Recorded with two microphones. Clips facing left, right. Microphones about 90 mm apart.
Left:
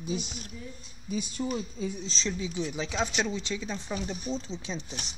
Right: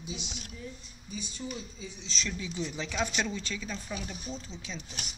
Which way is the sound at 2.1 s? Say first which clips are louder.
Left 4 dB; 30° left (ahead or behind).